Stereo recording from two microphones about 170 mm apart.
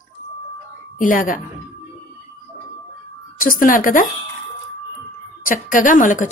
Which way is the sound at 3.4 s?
55° left (ahead or behind).